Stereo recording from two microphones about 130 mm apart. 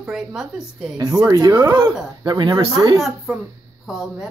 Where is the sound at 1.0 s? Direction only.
30° right (ahead or behind).